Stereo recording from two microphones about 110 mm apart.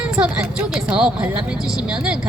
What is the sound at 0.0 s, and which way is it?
A woman's voice, 10° right (ahead or behind).